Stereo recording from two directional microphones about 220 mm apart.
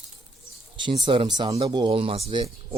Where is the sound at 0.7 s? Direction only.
20° right (ahead or behind).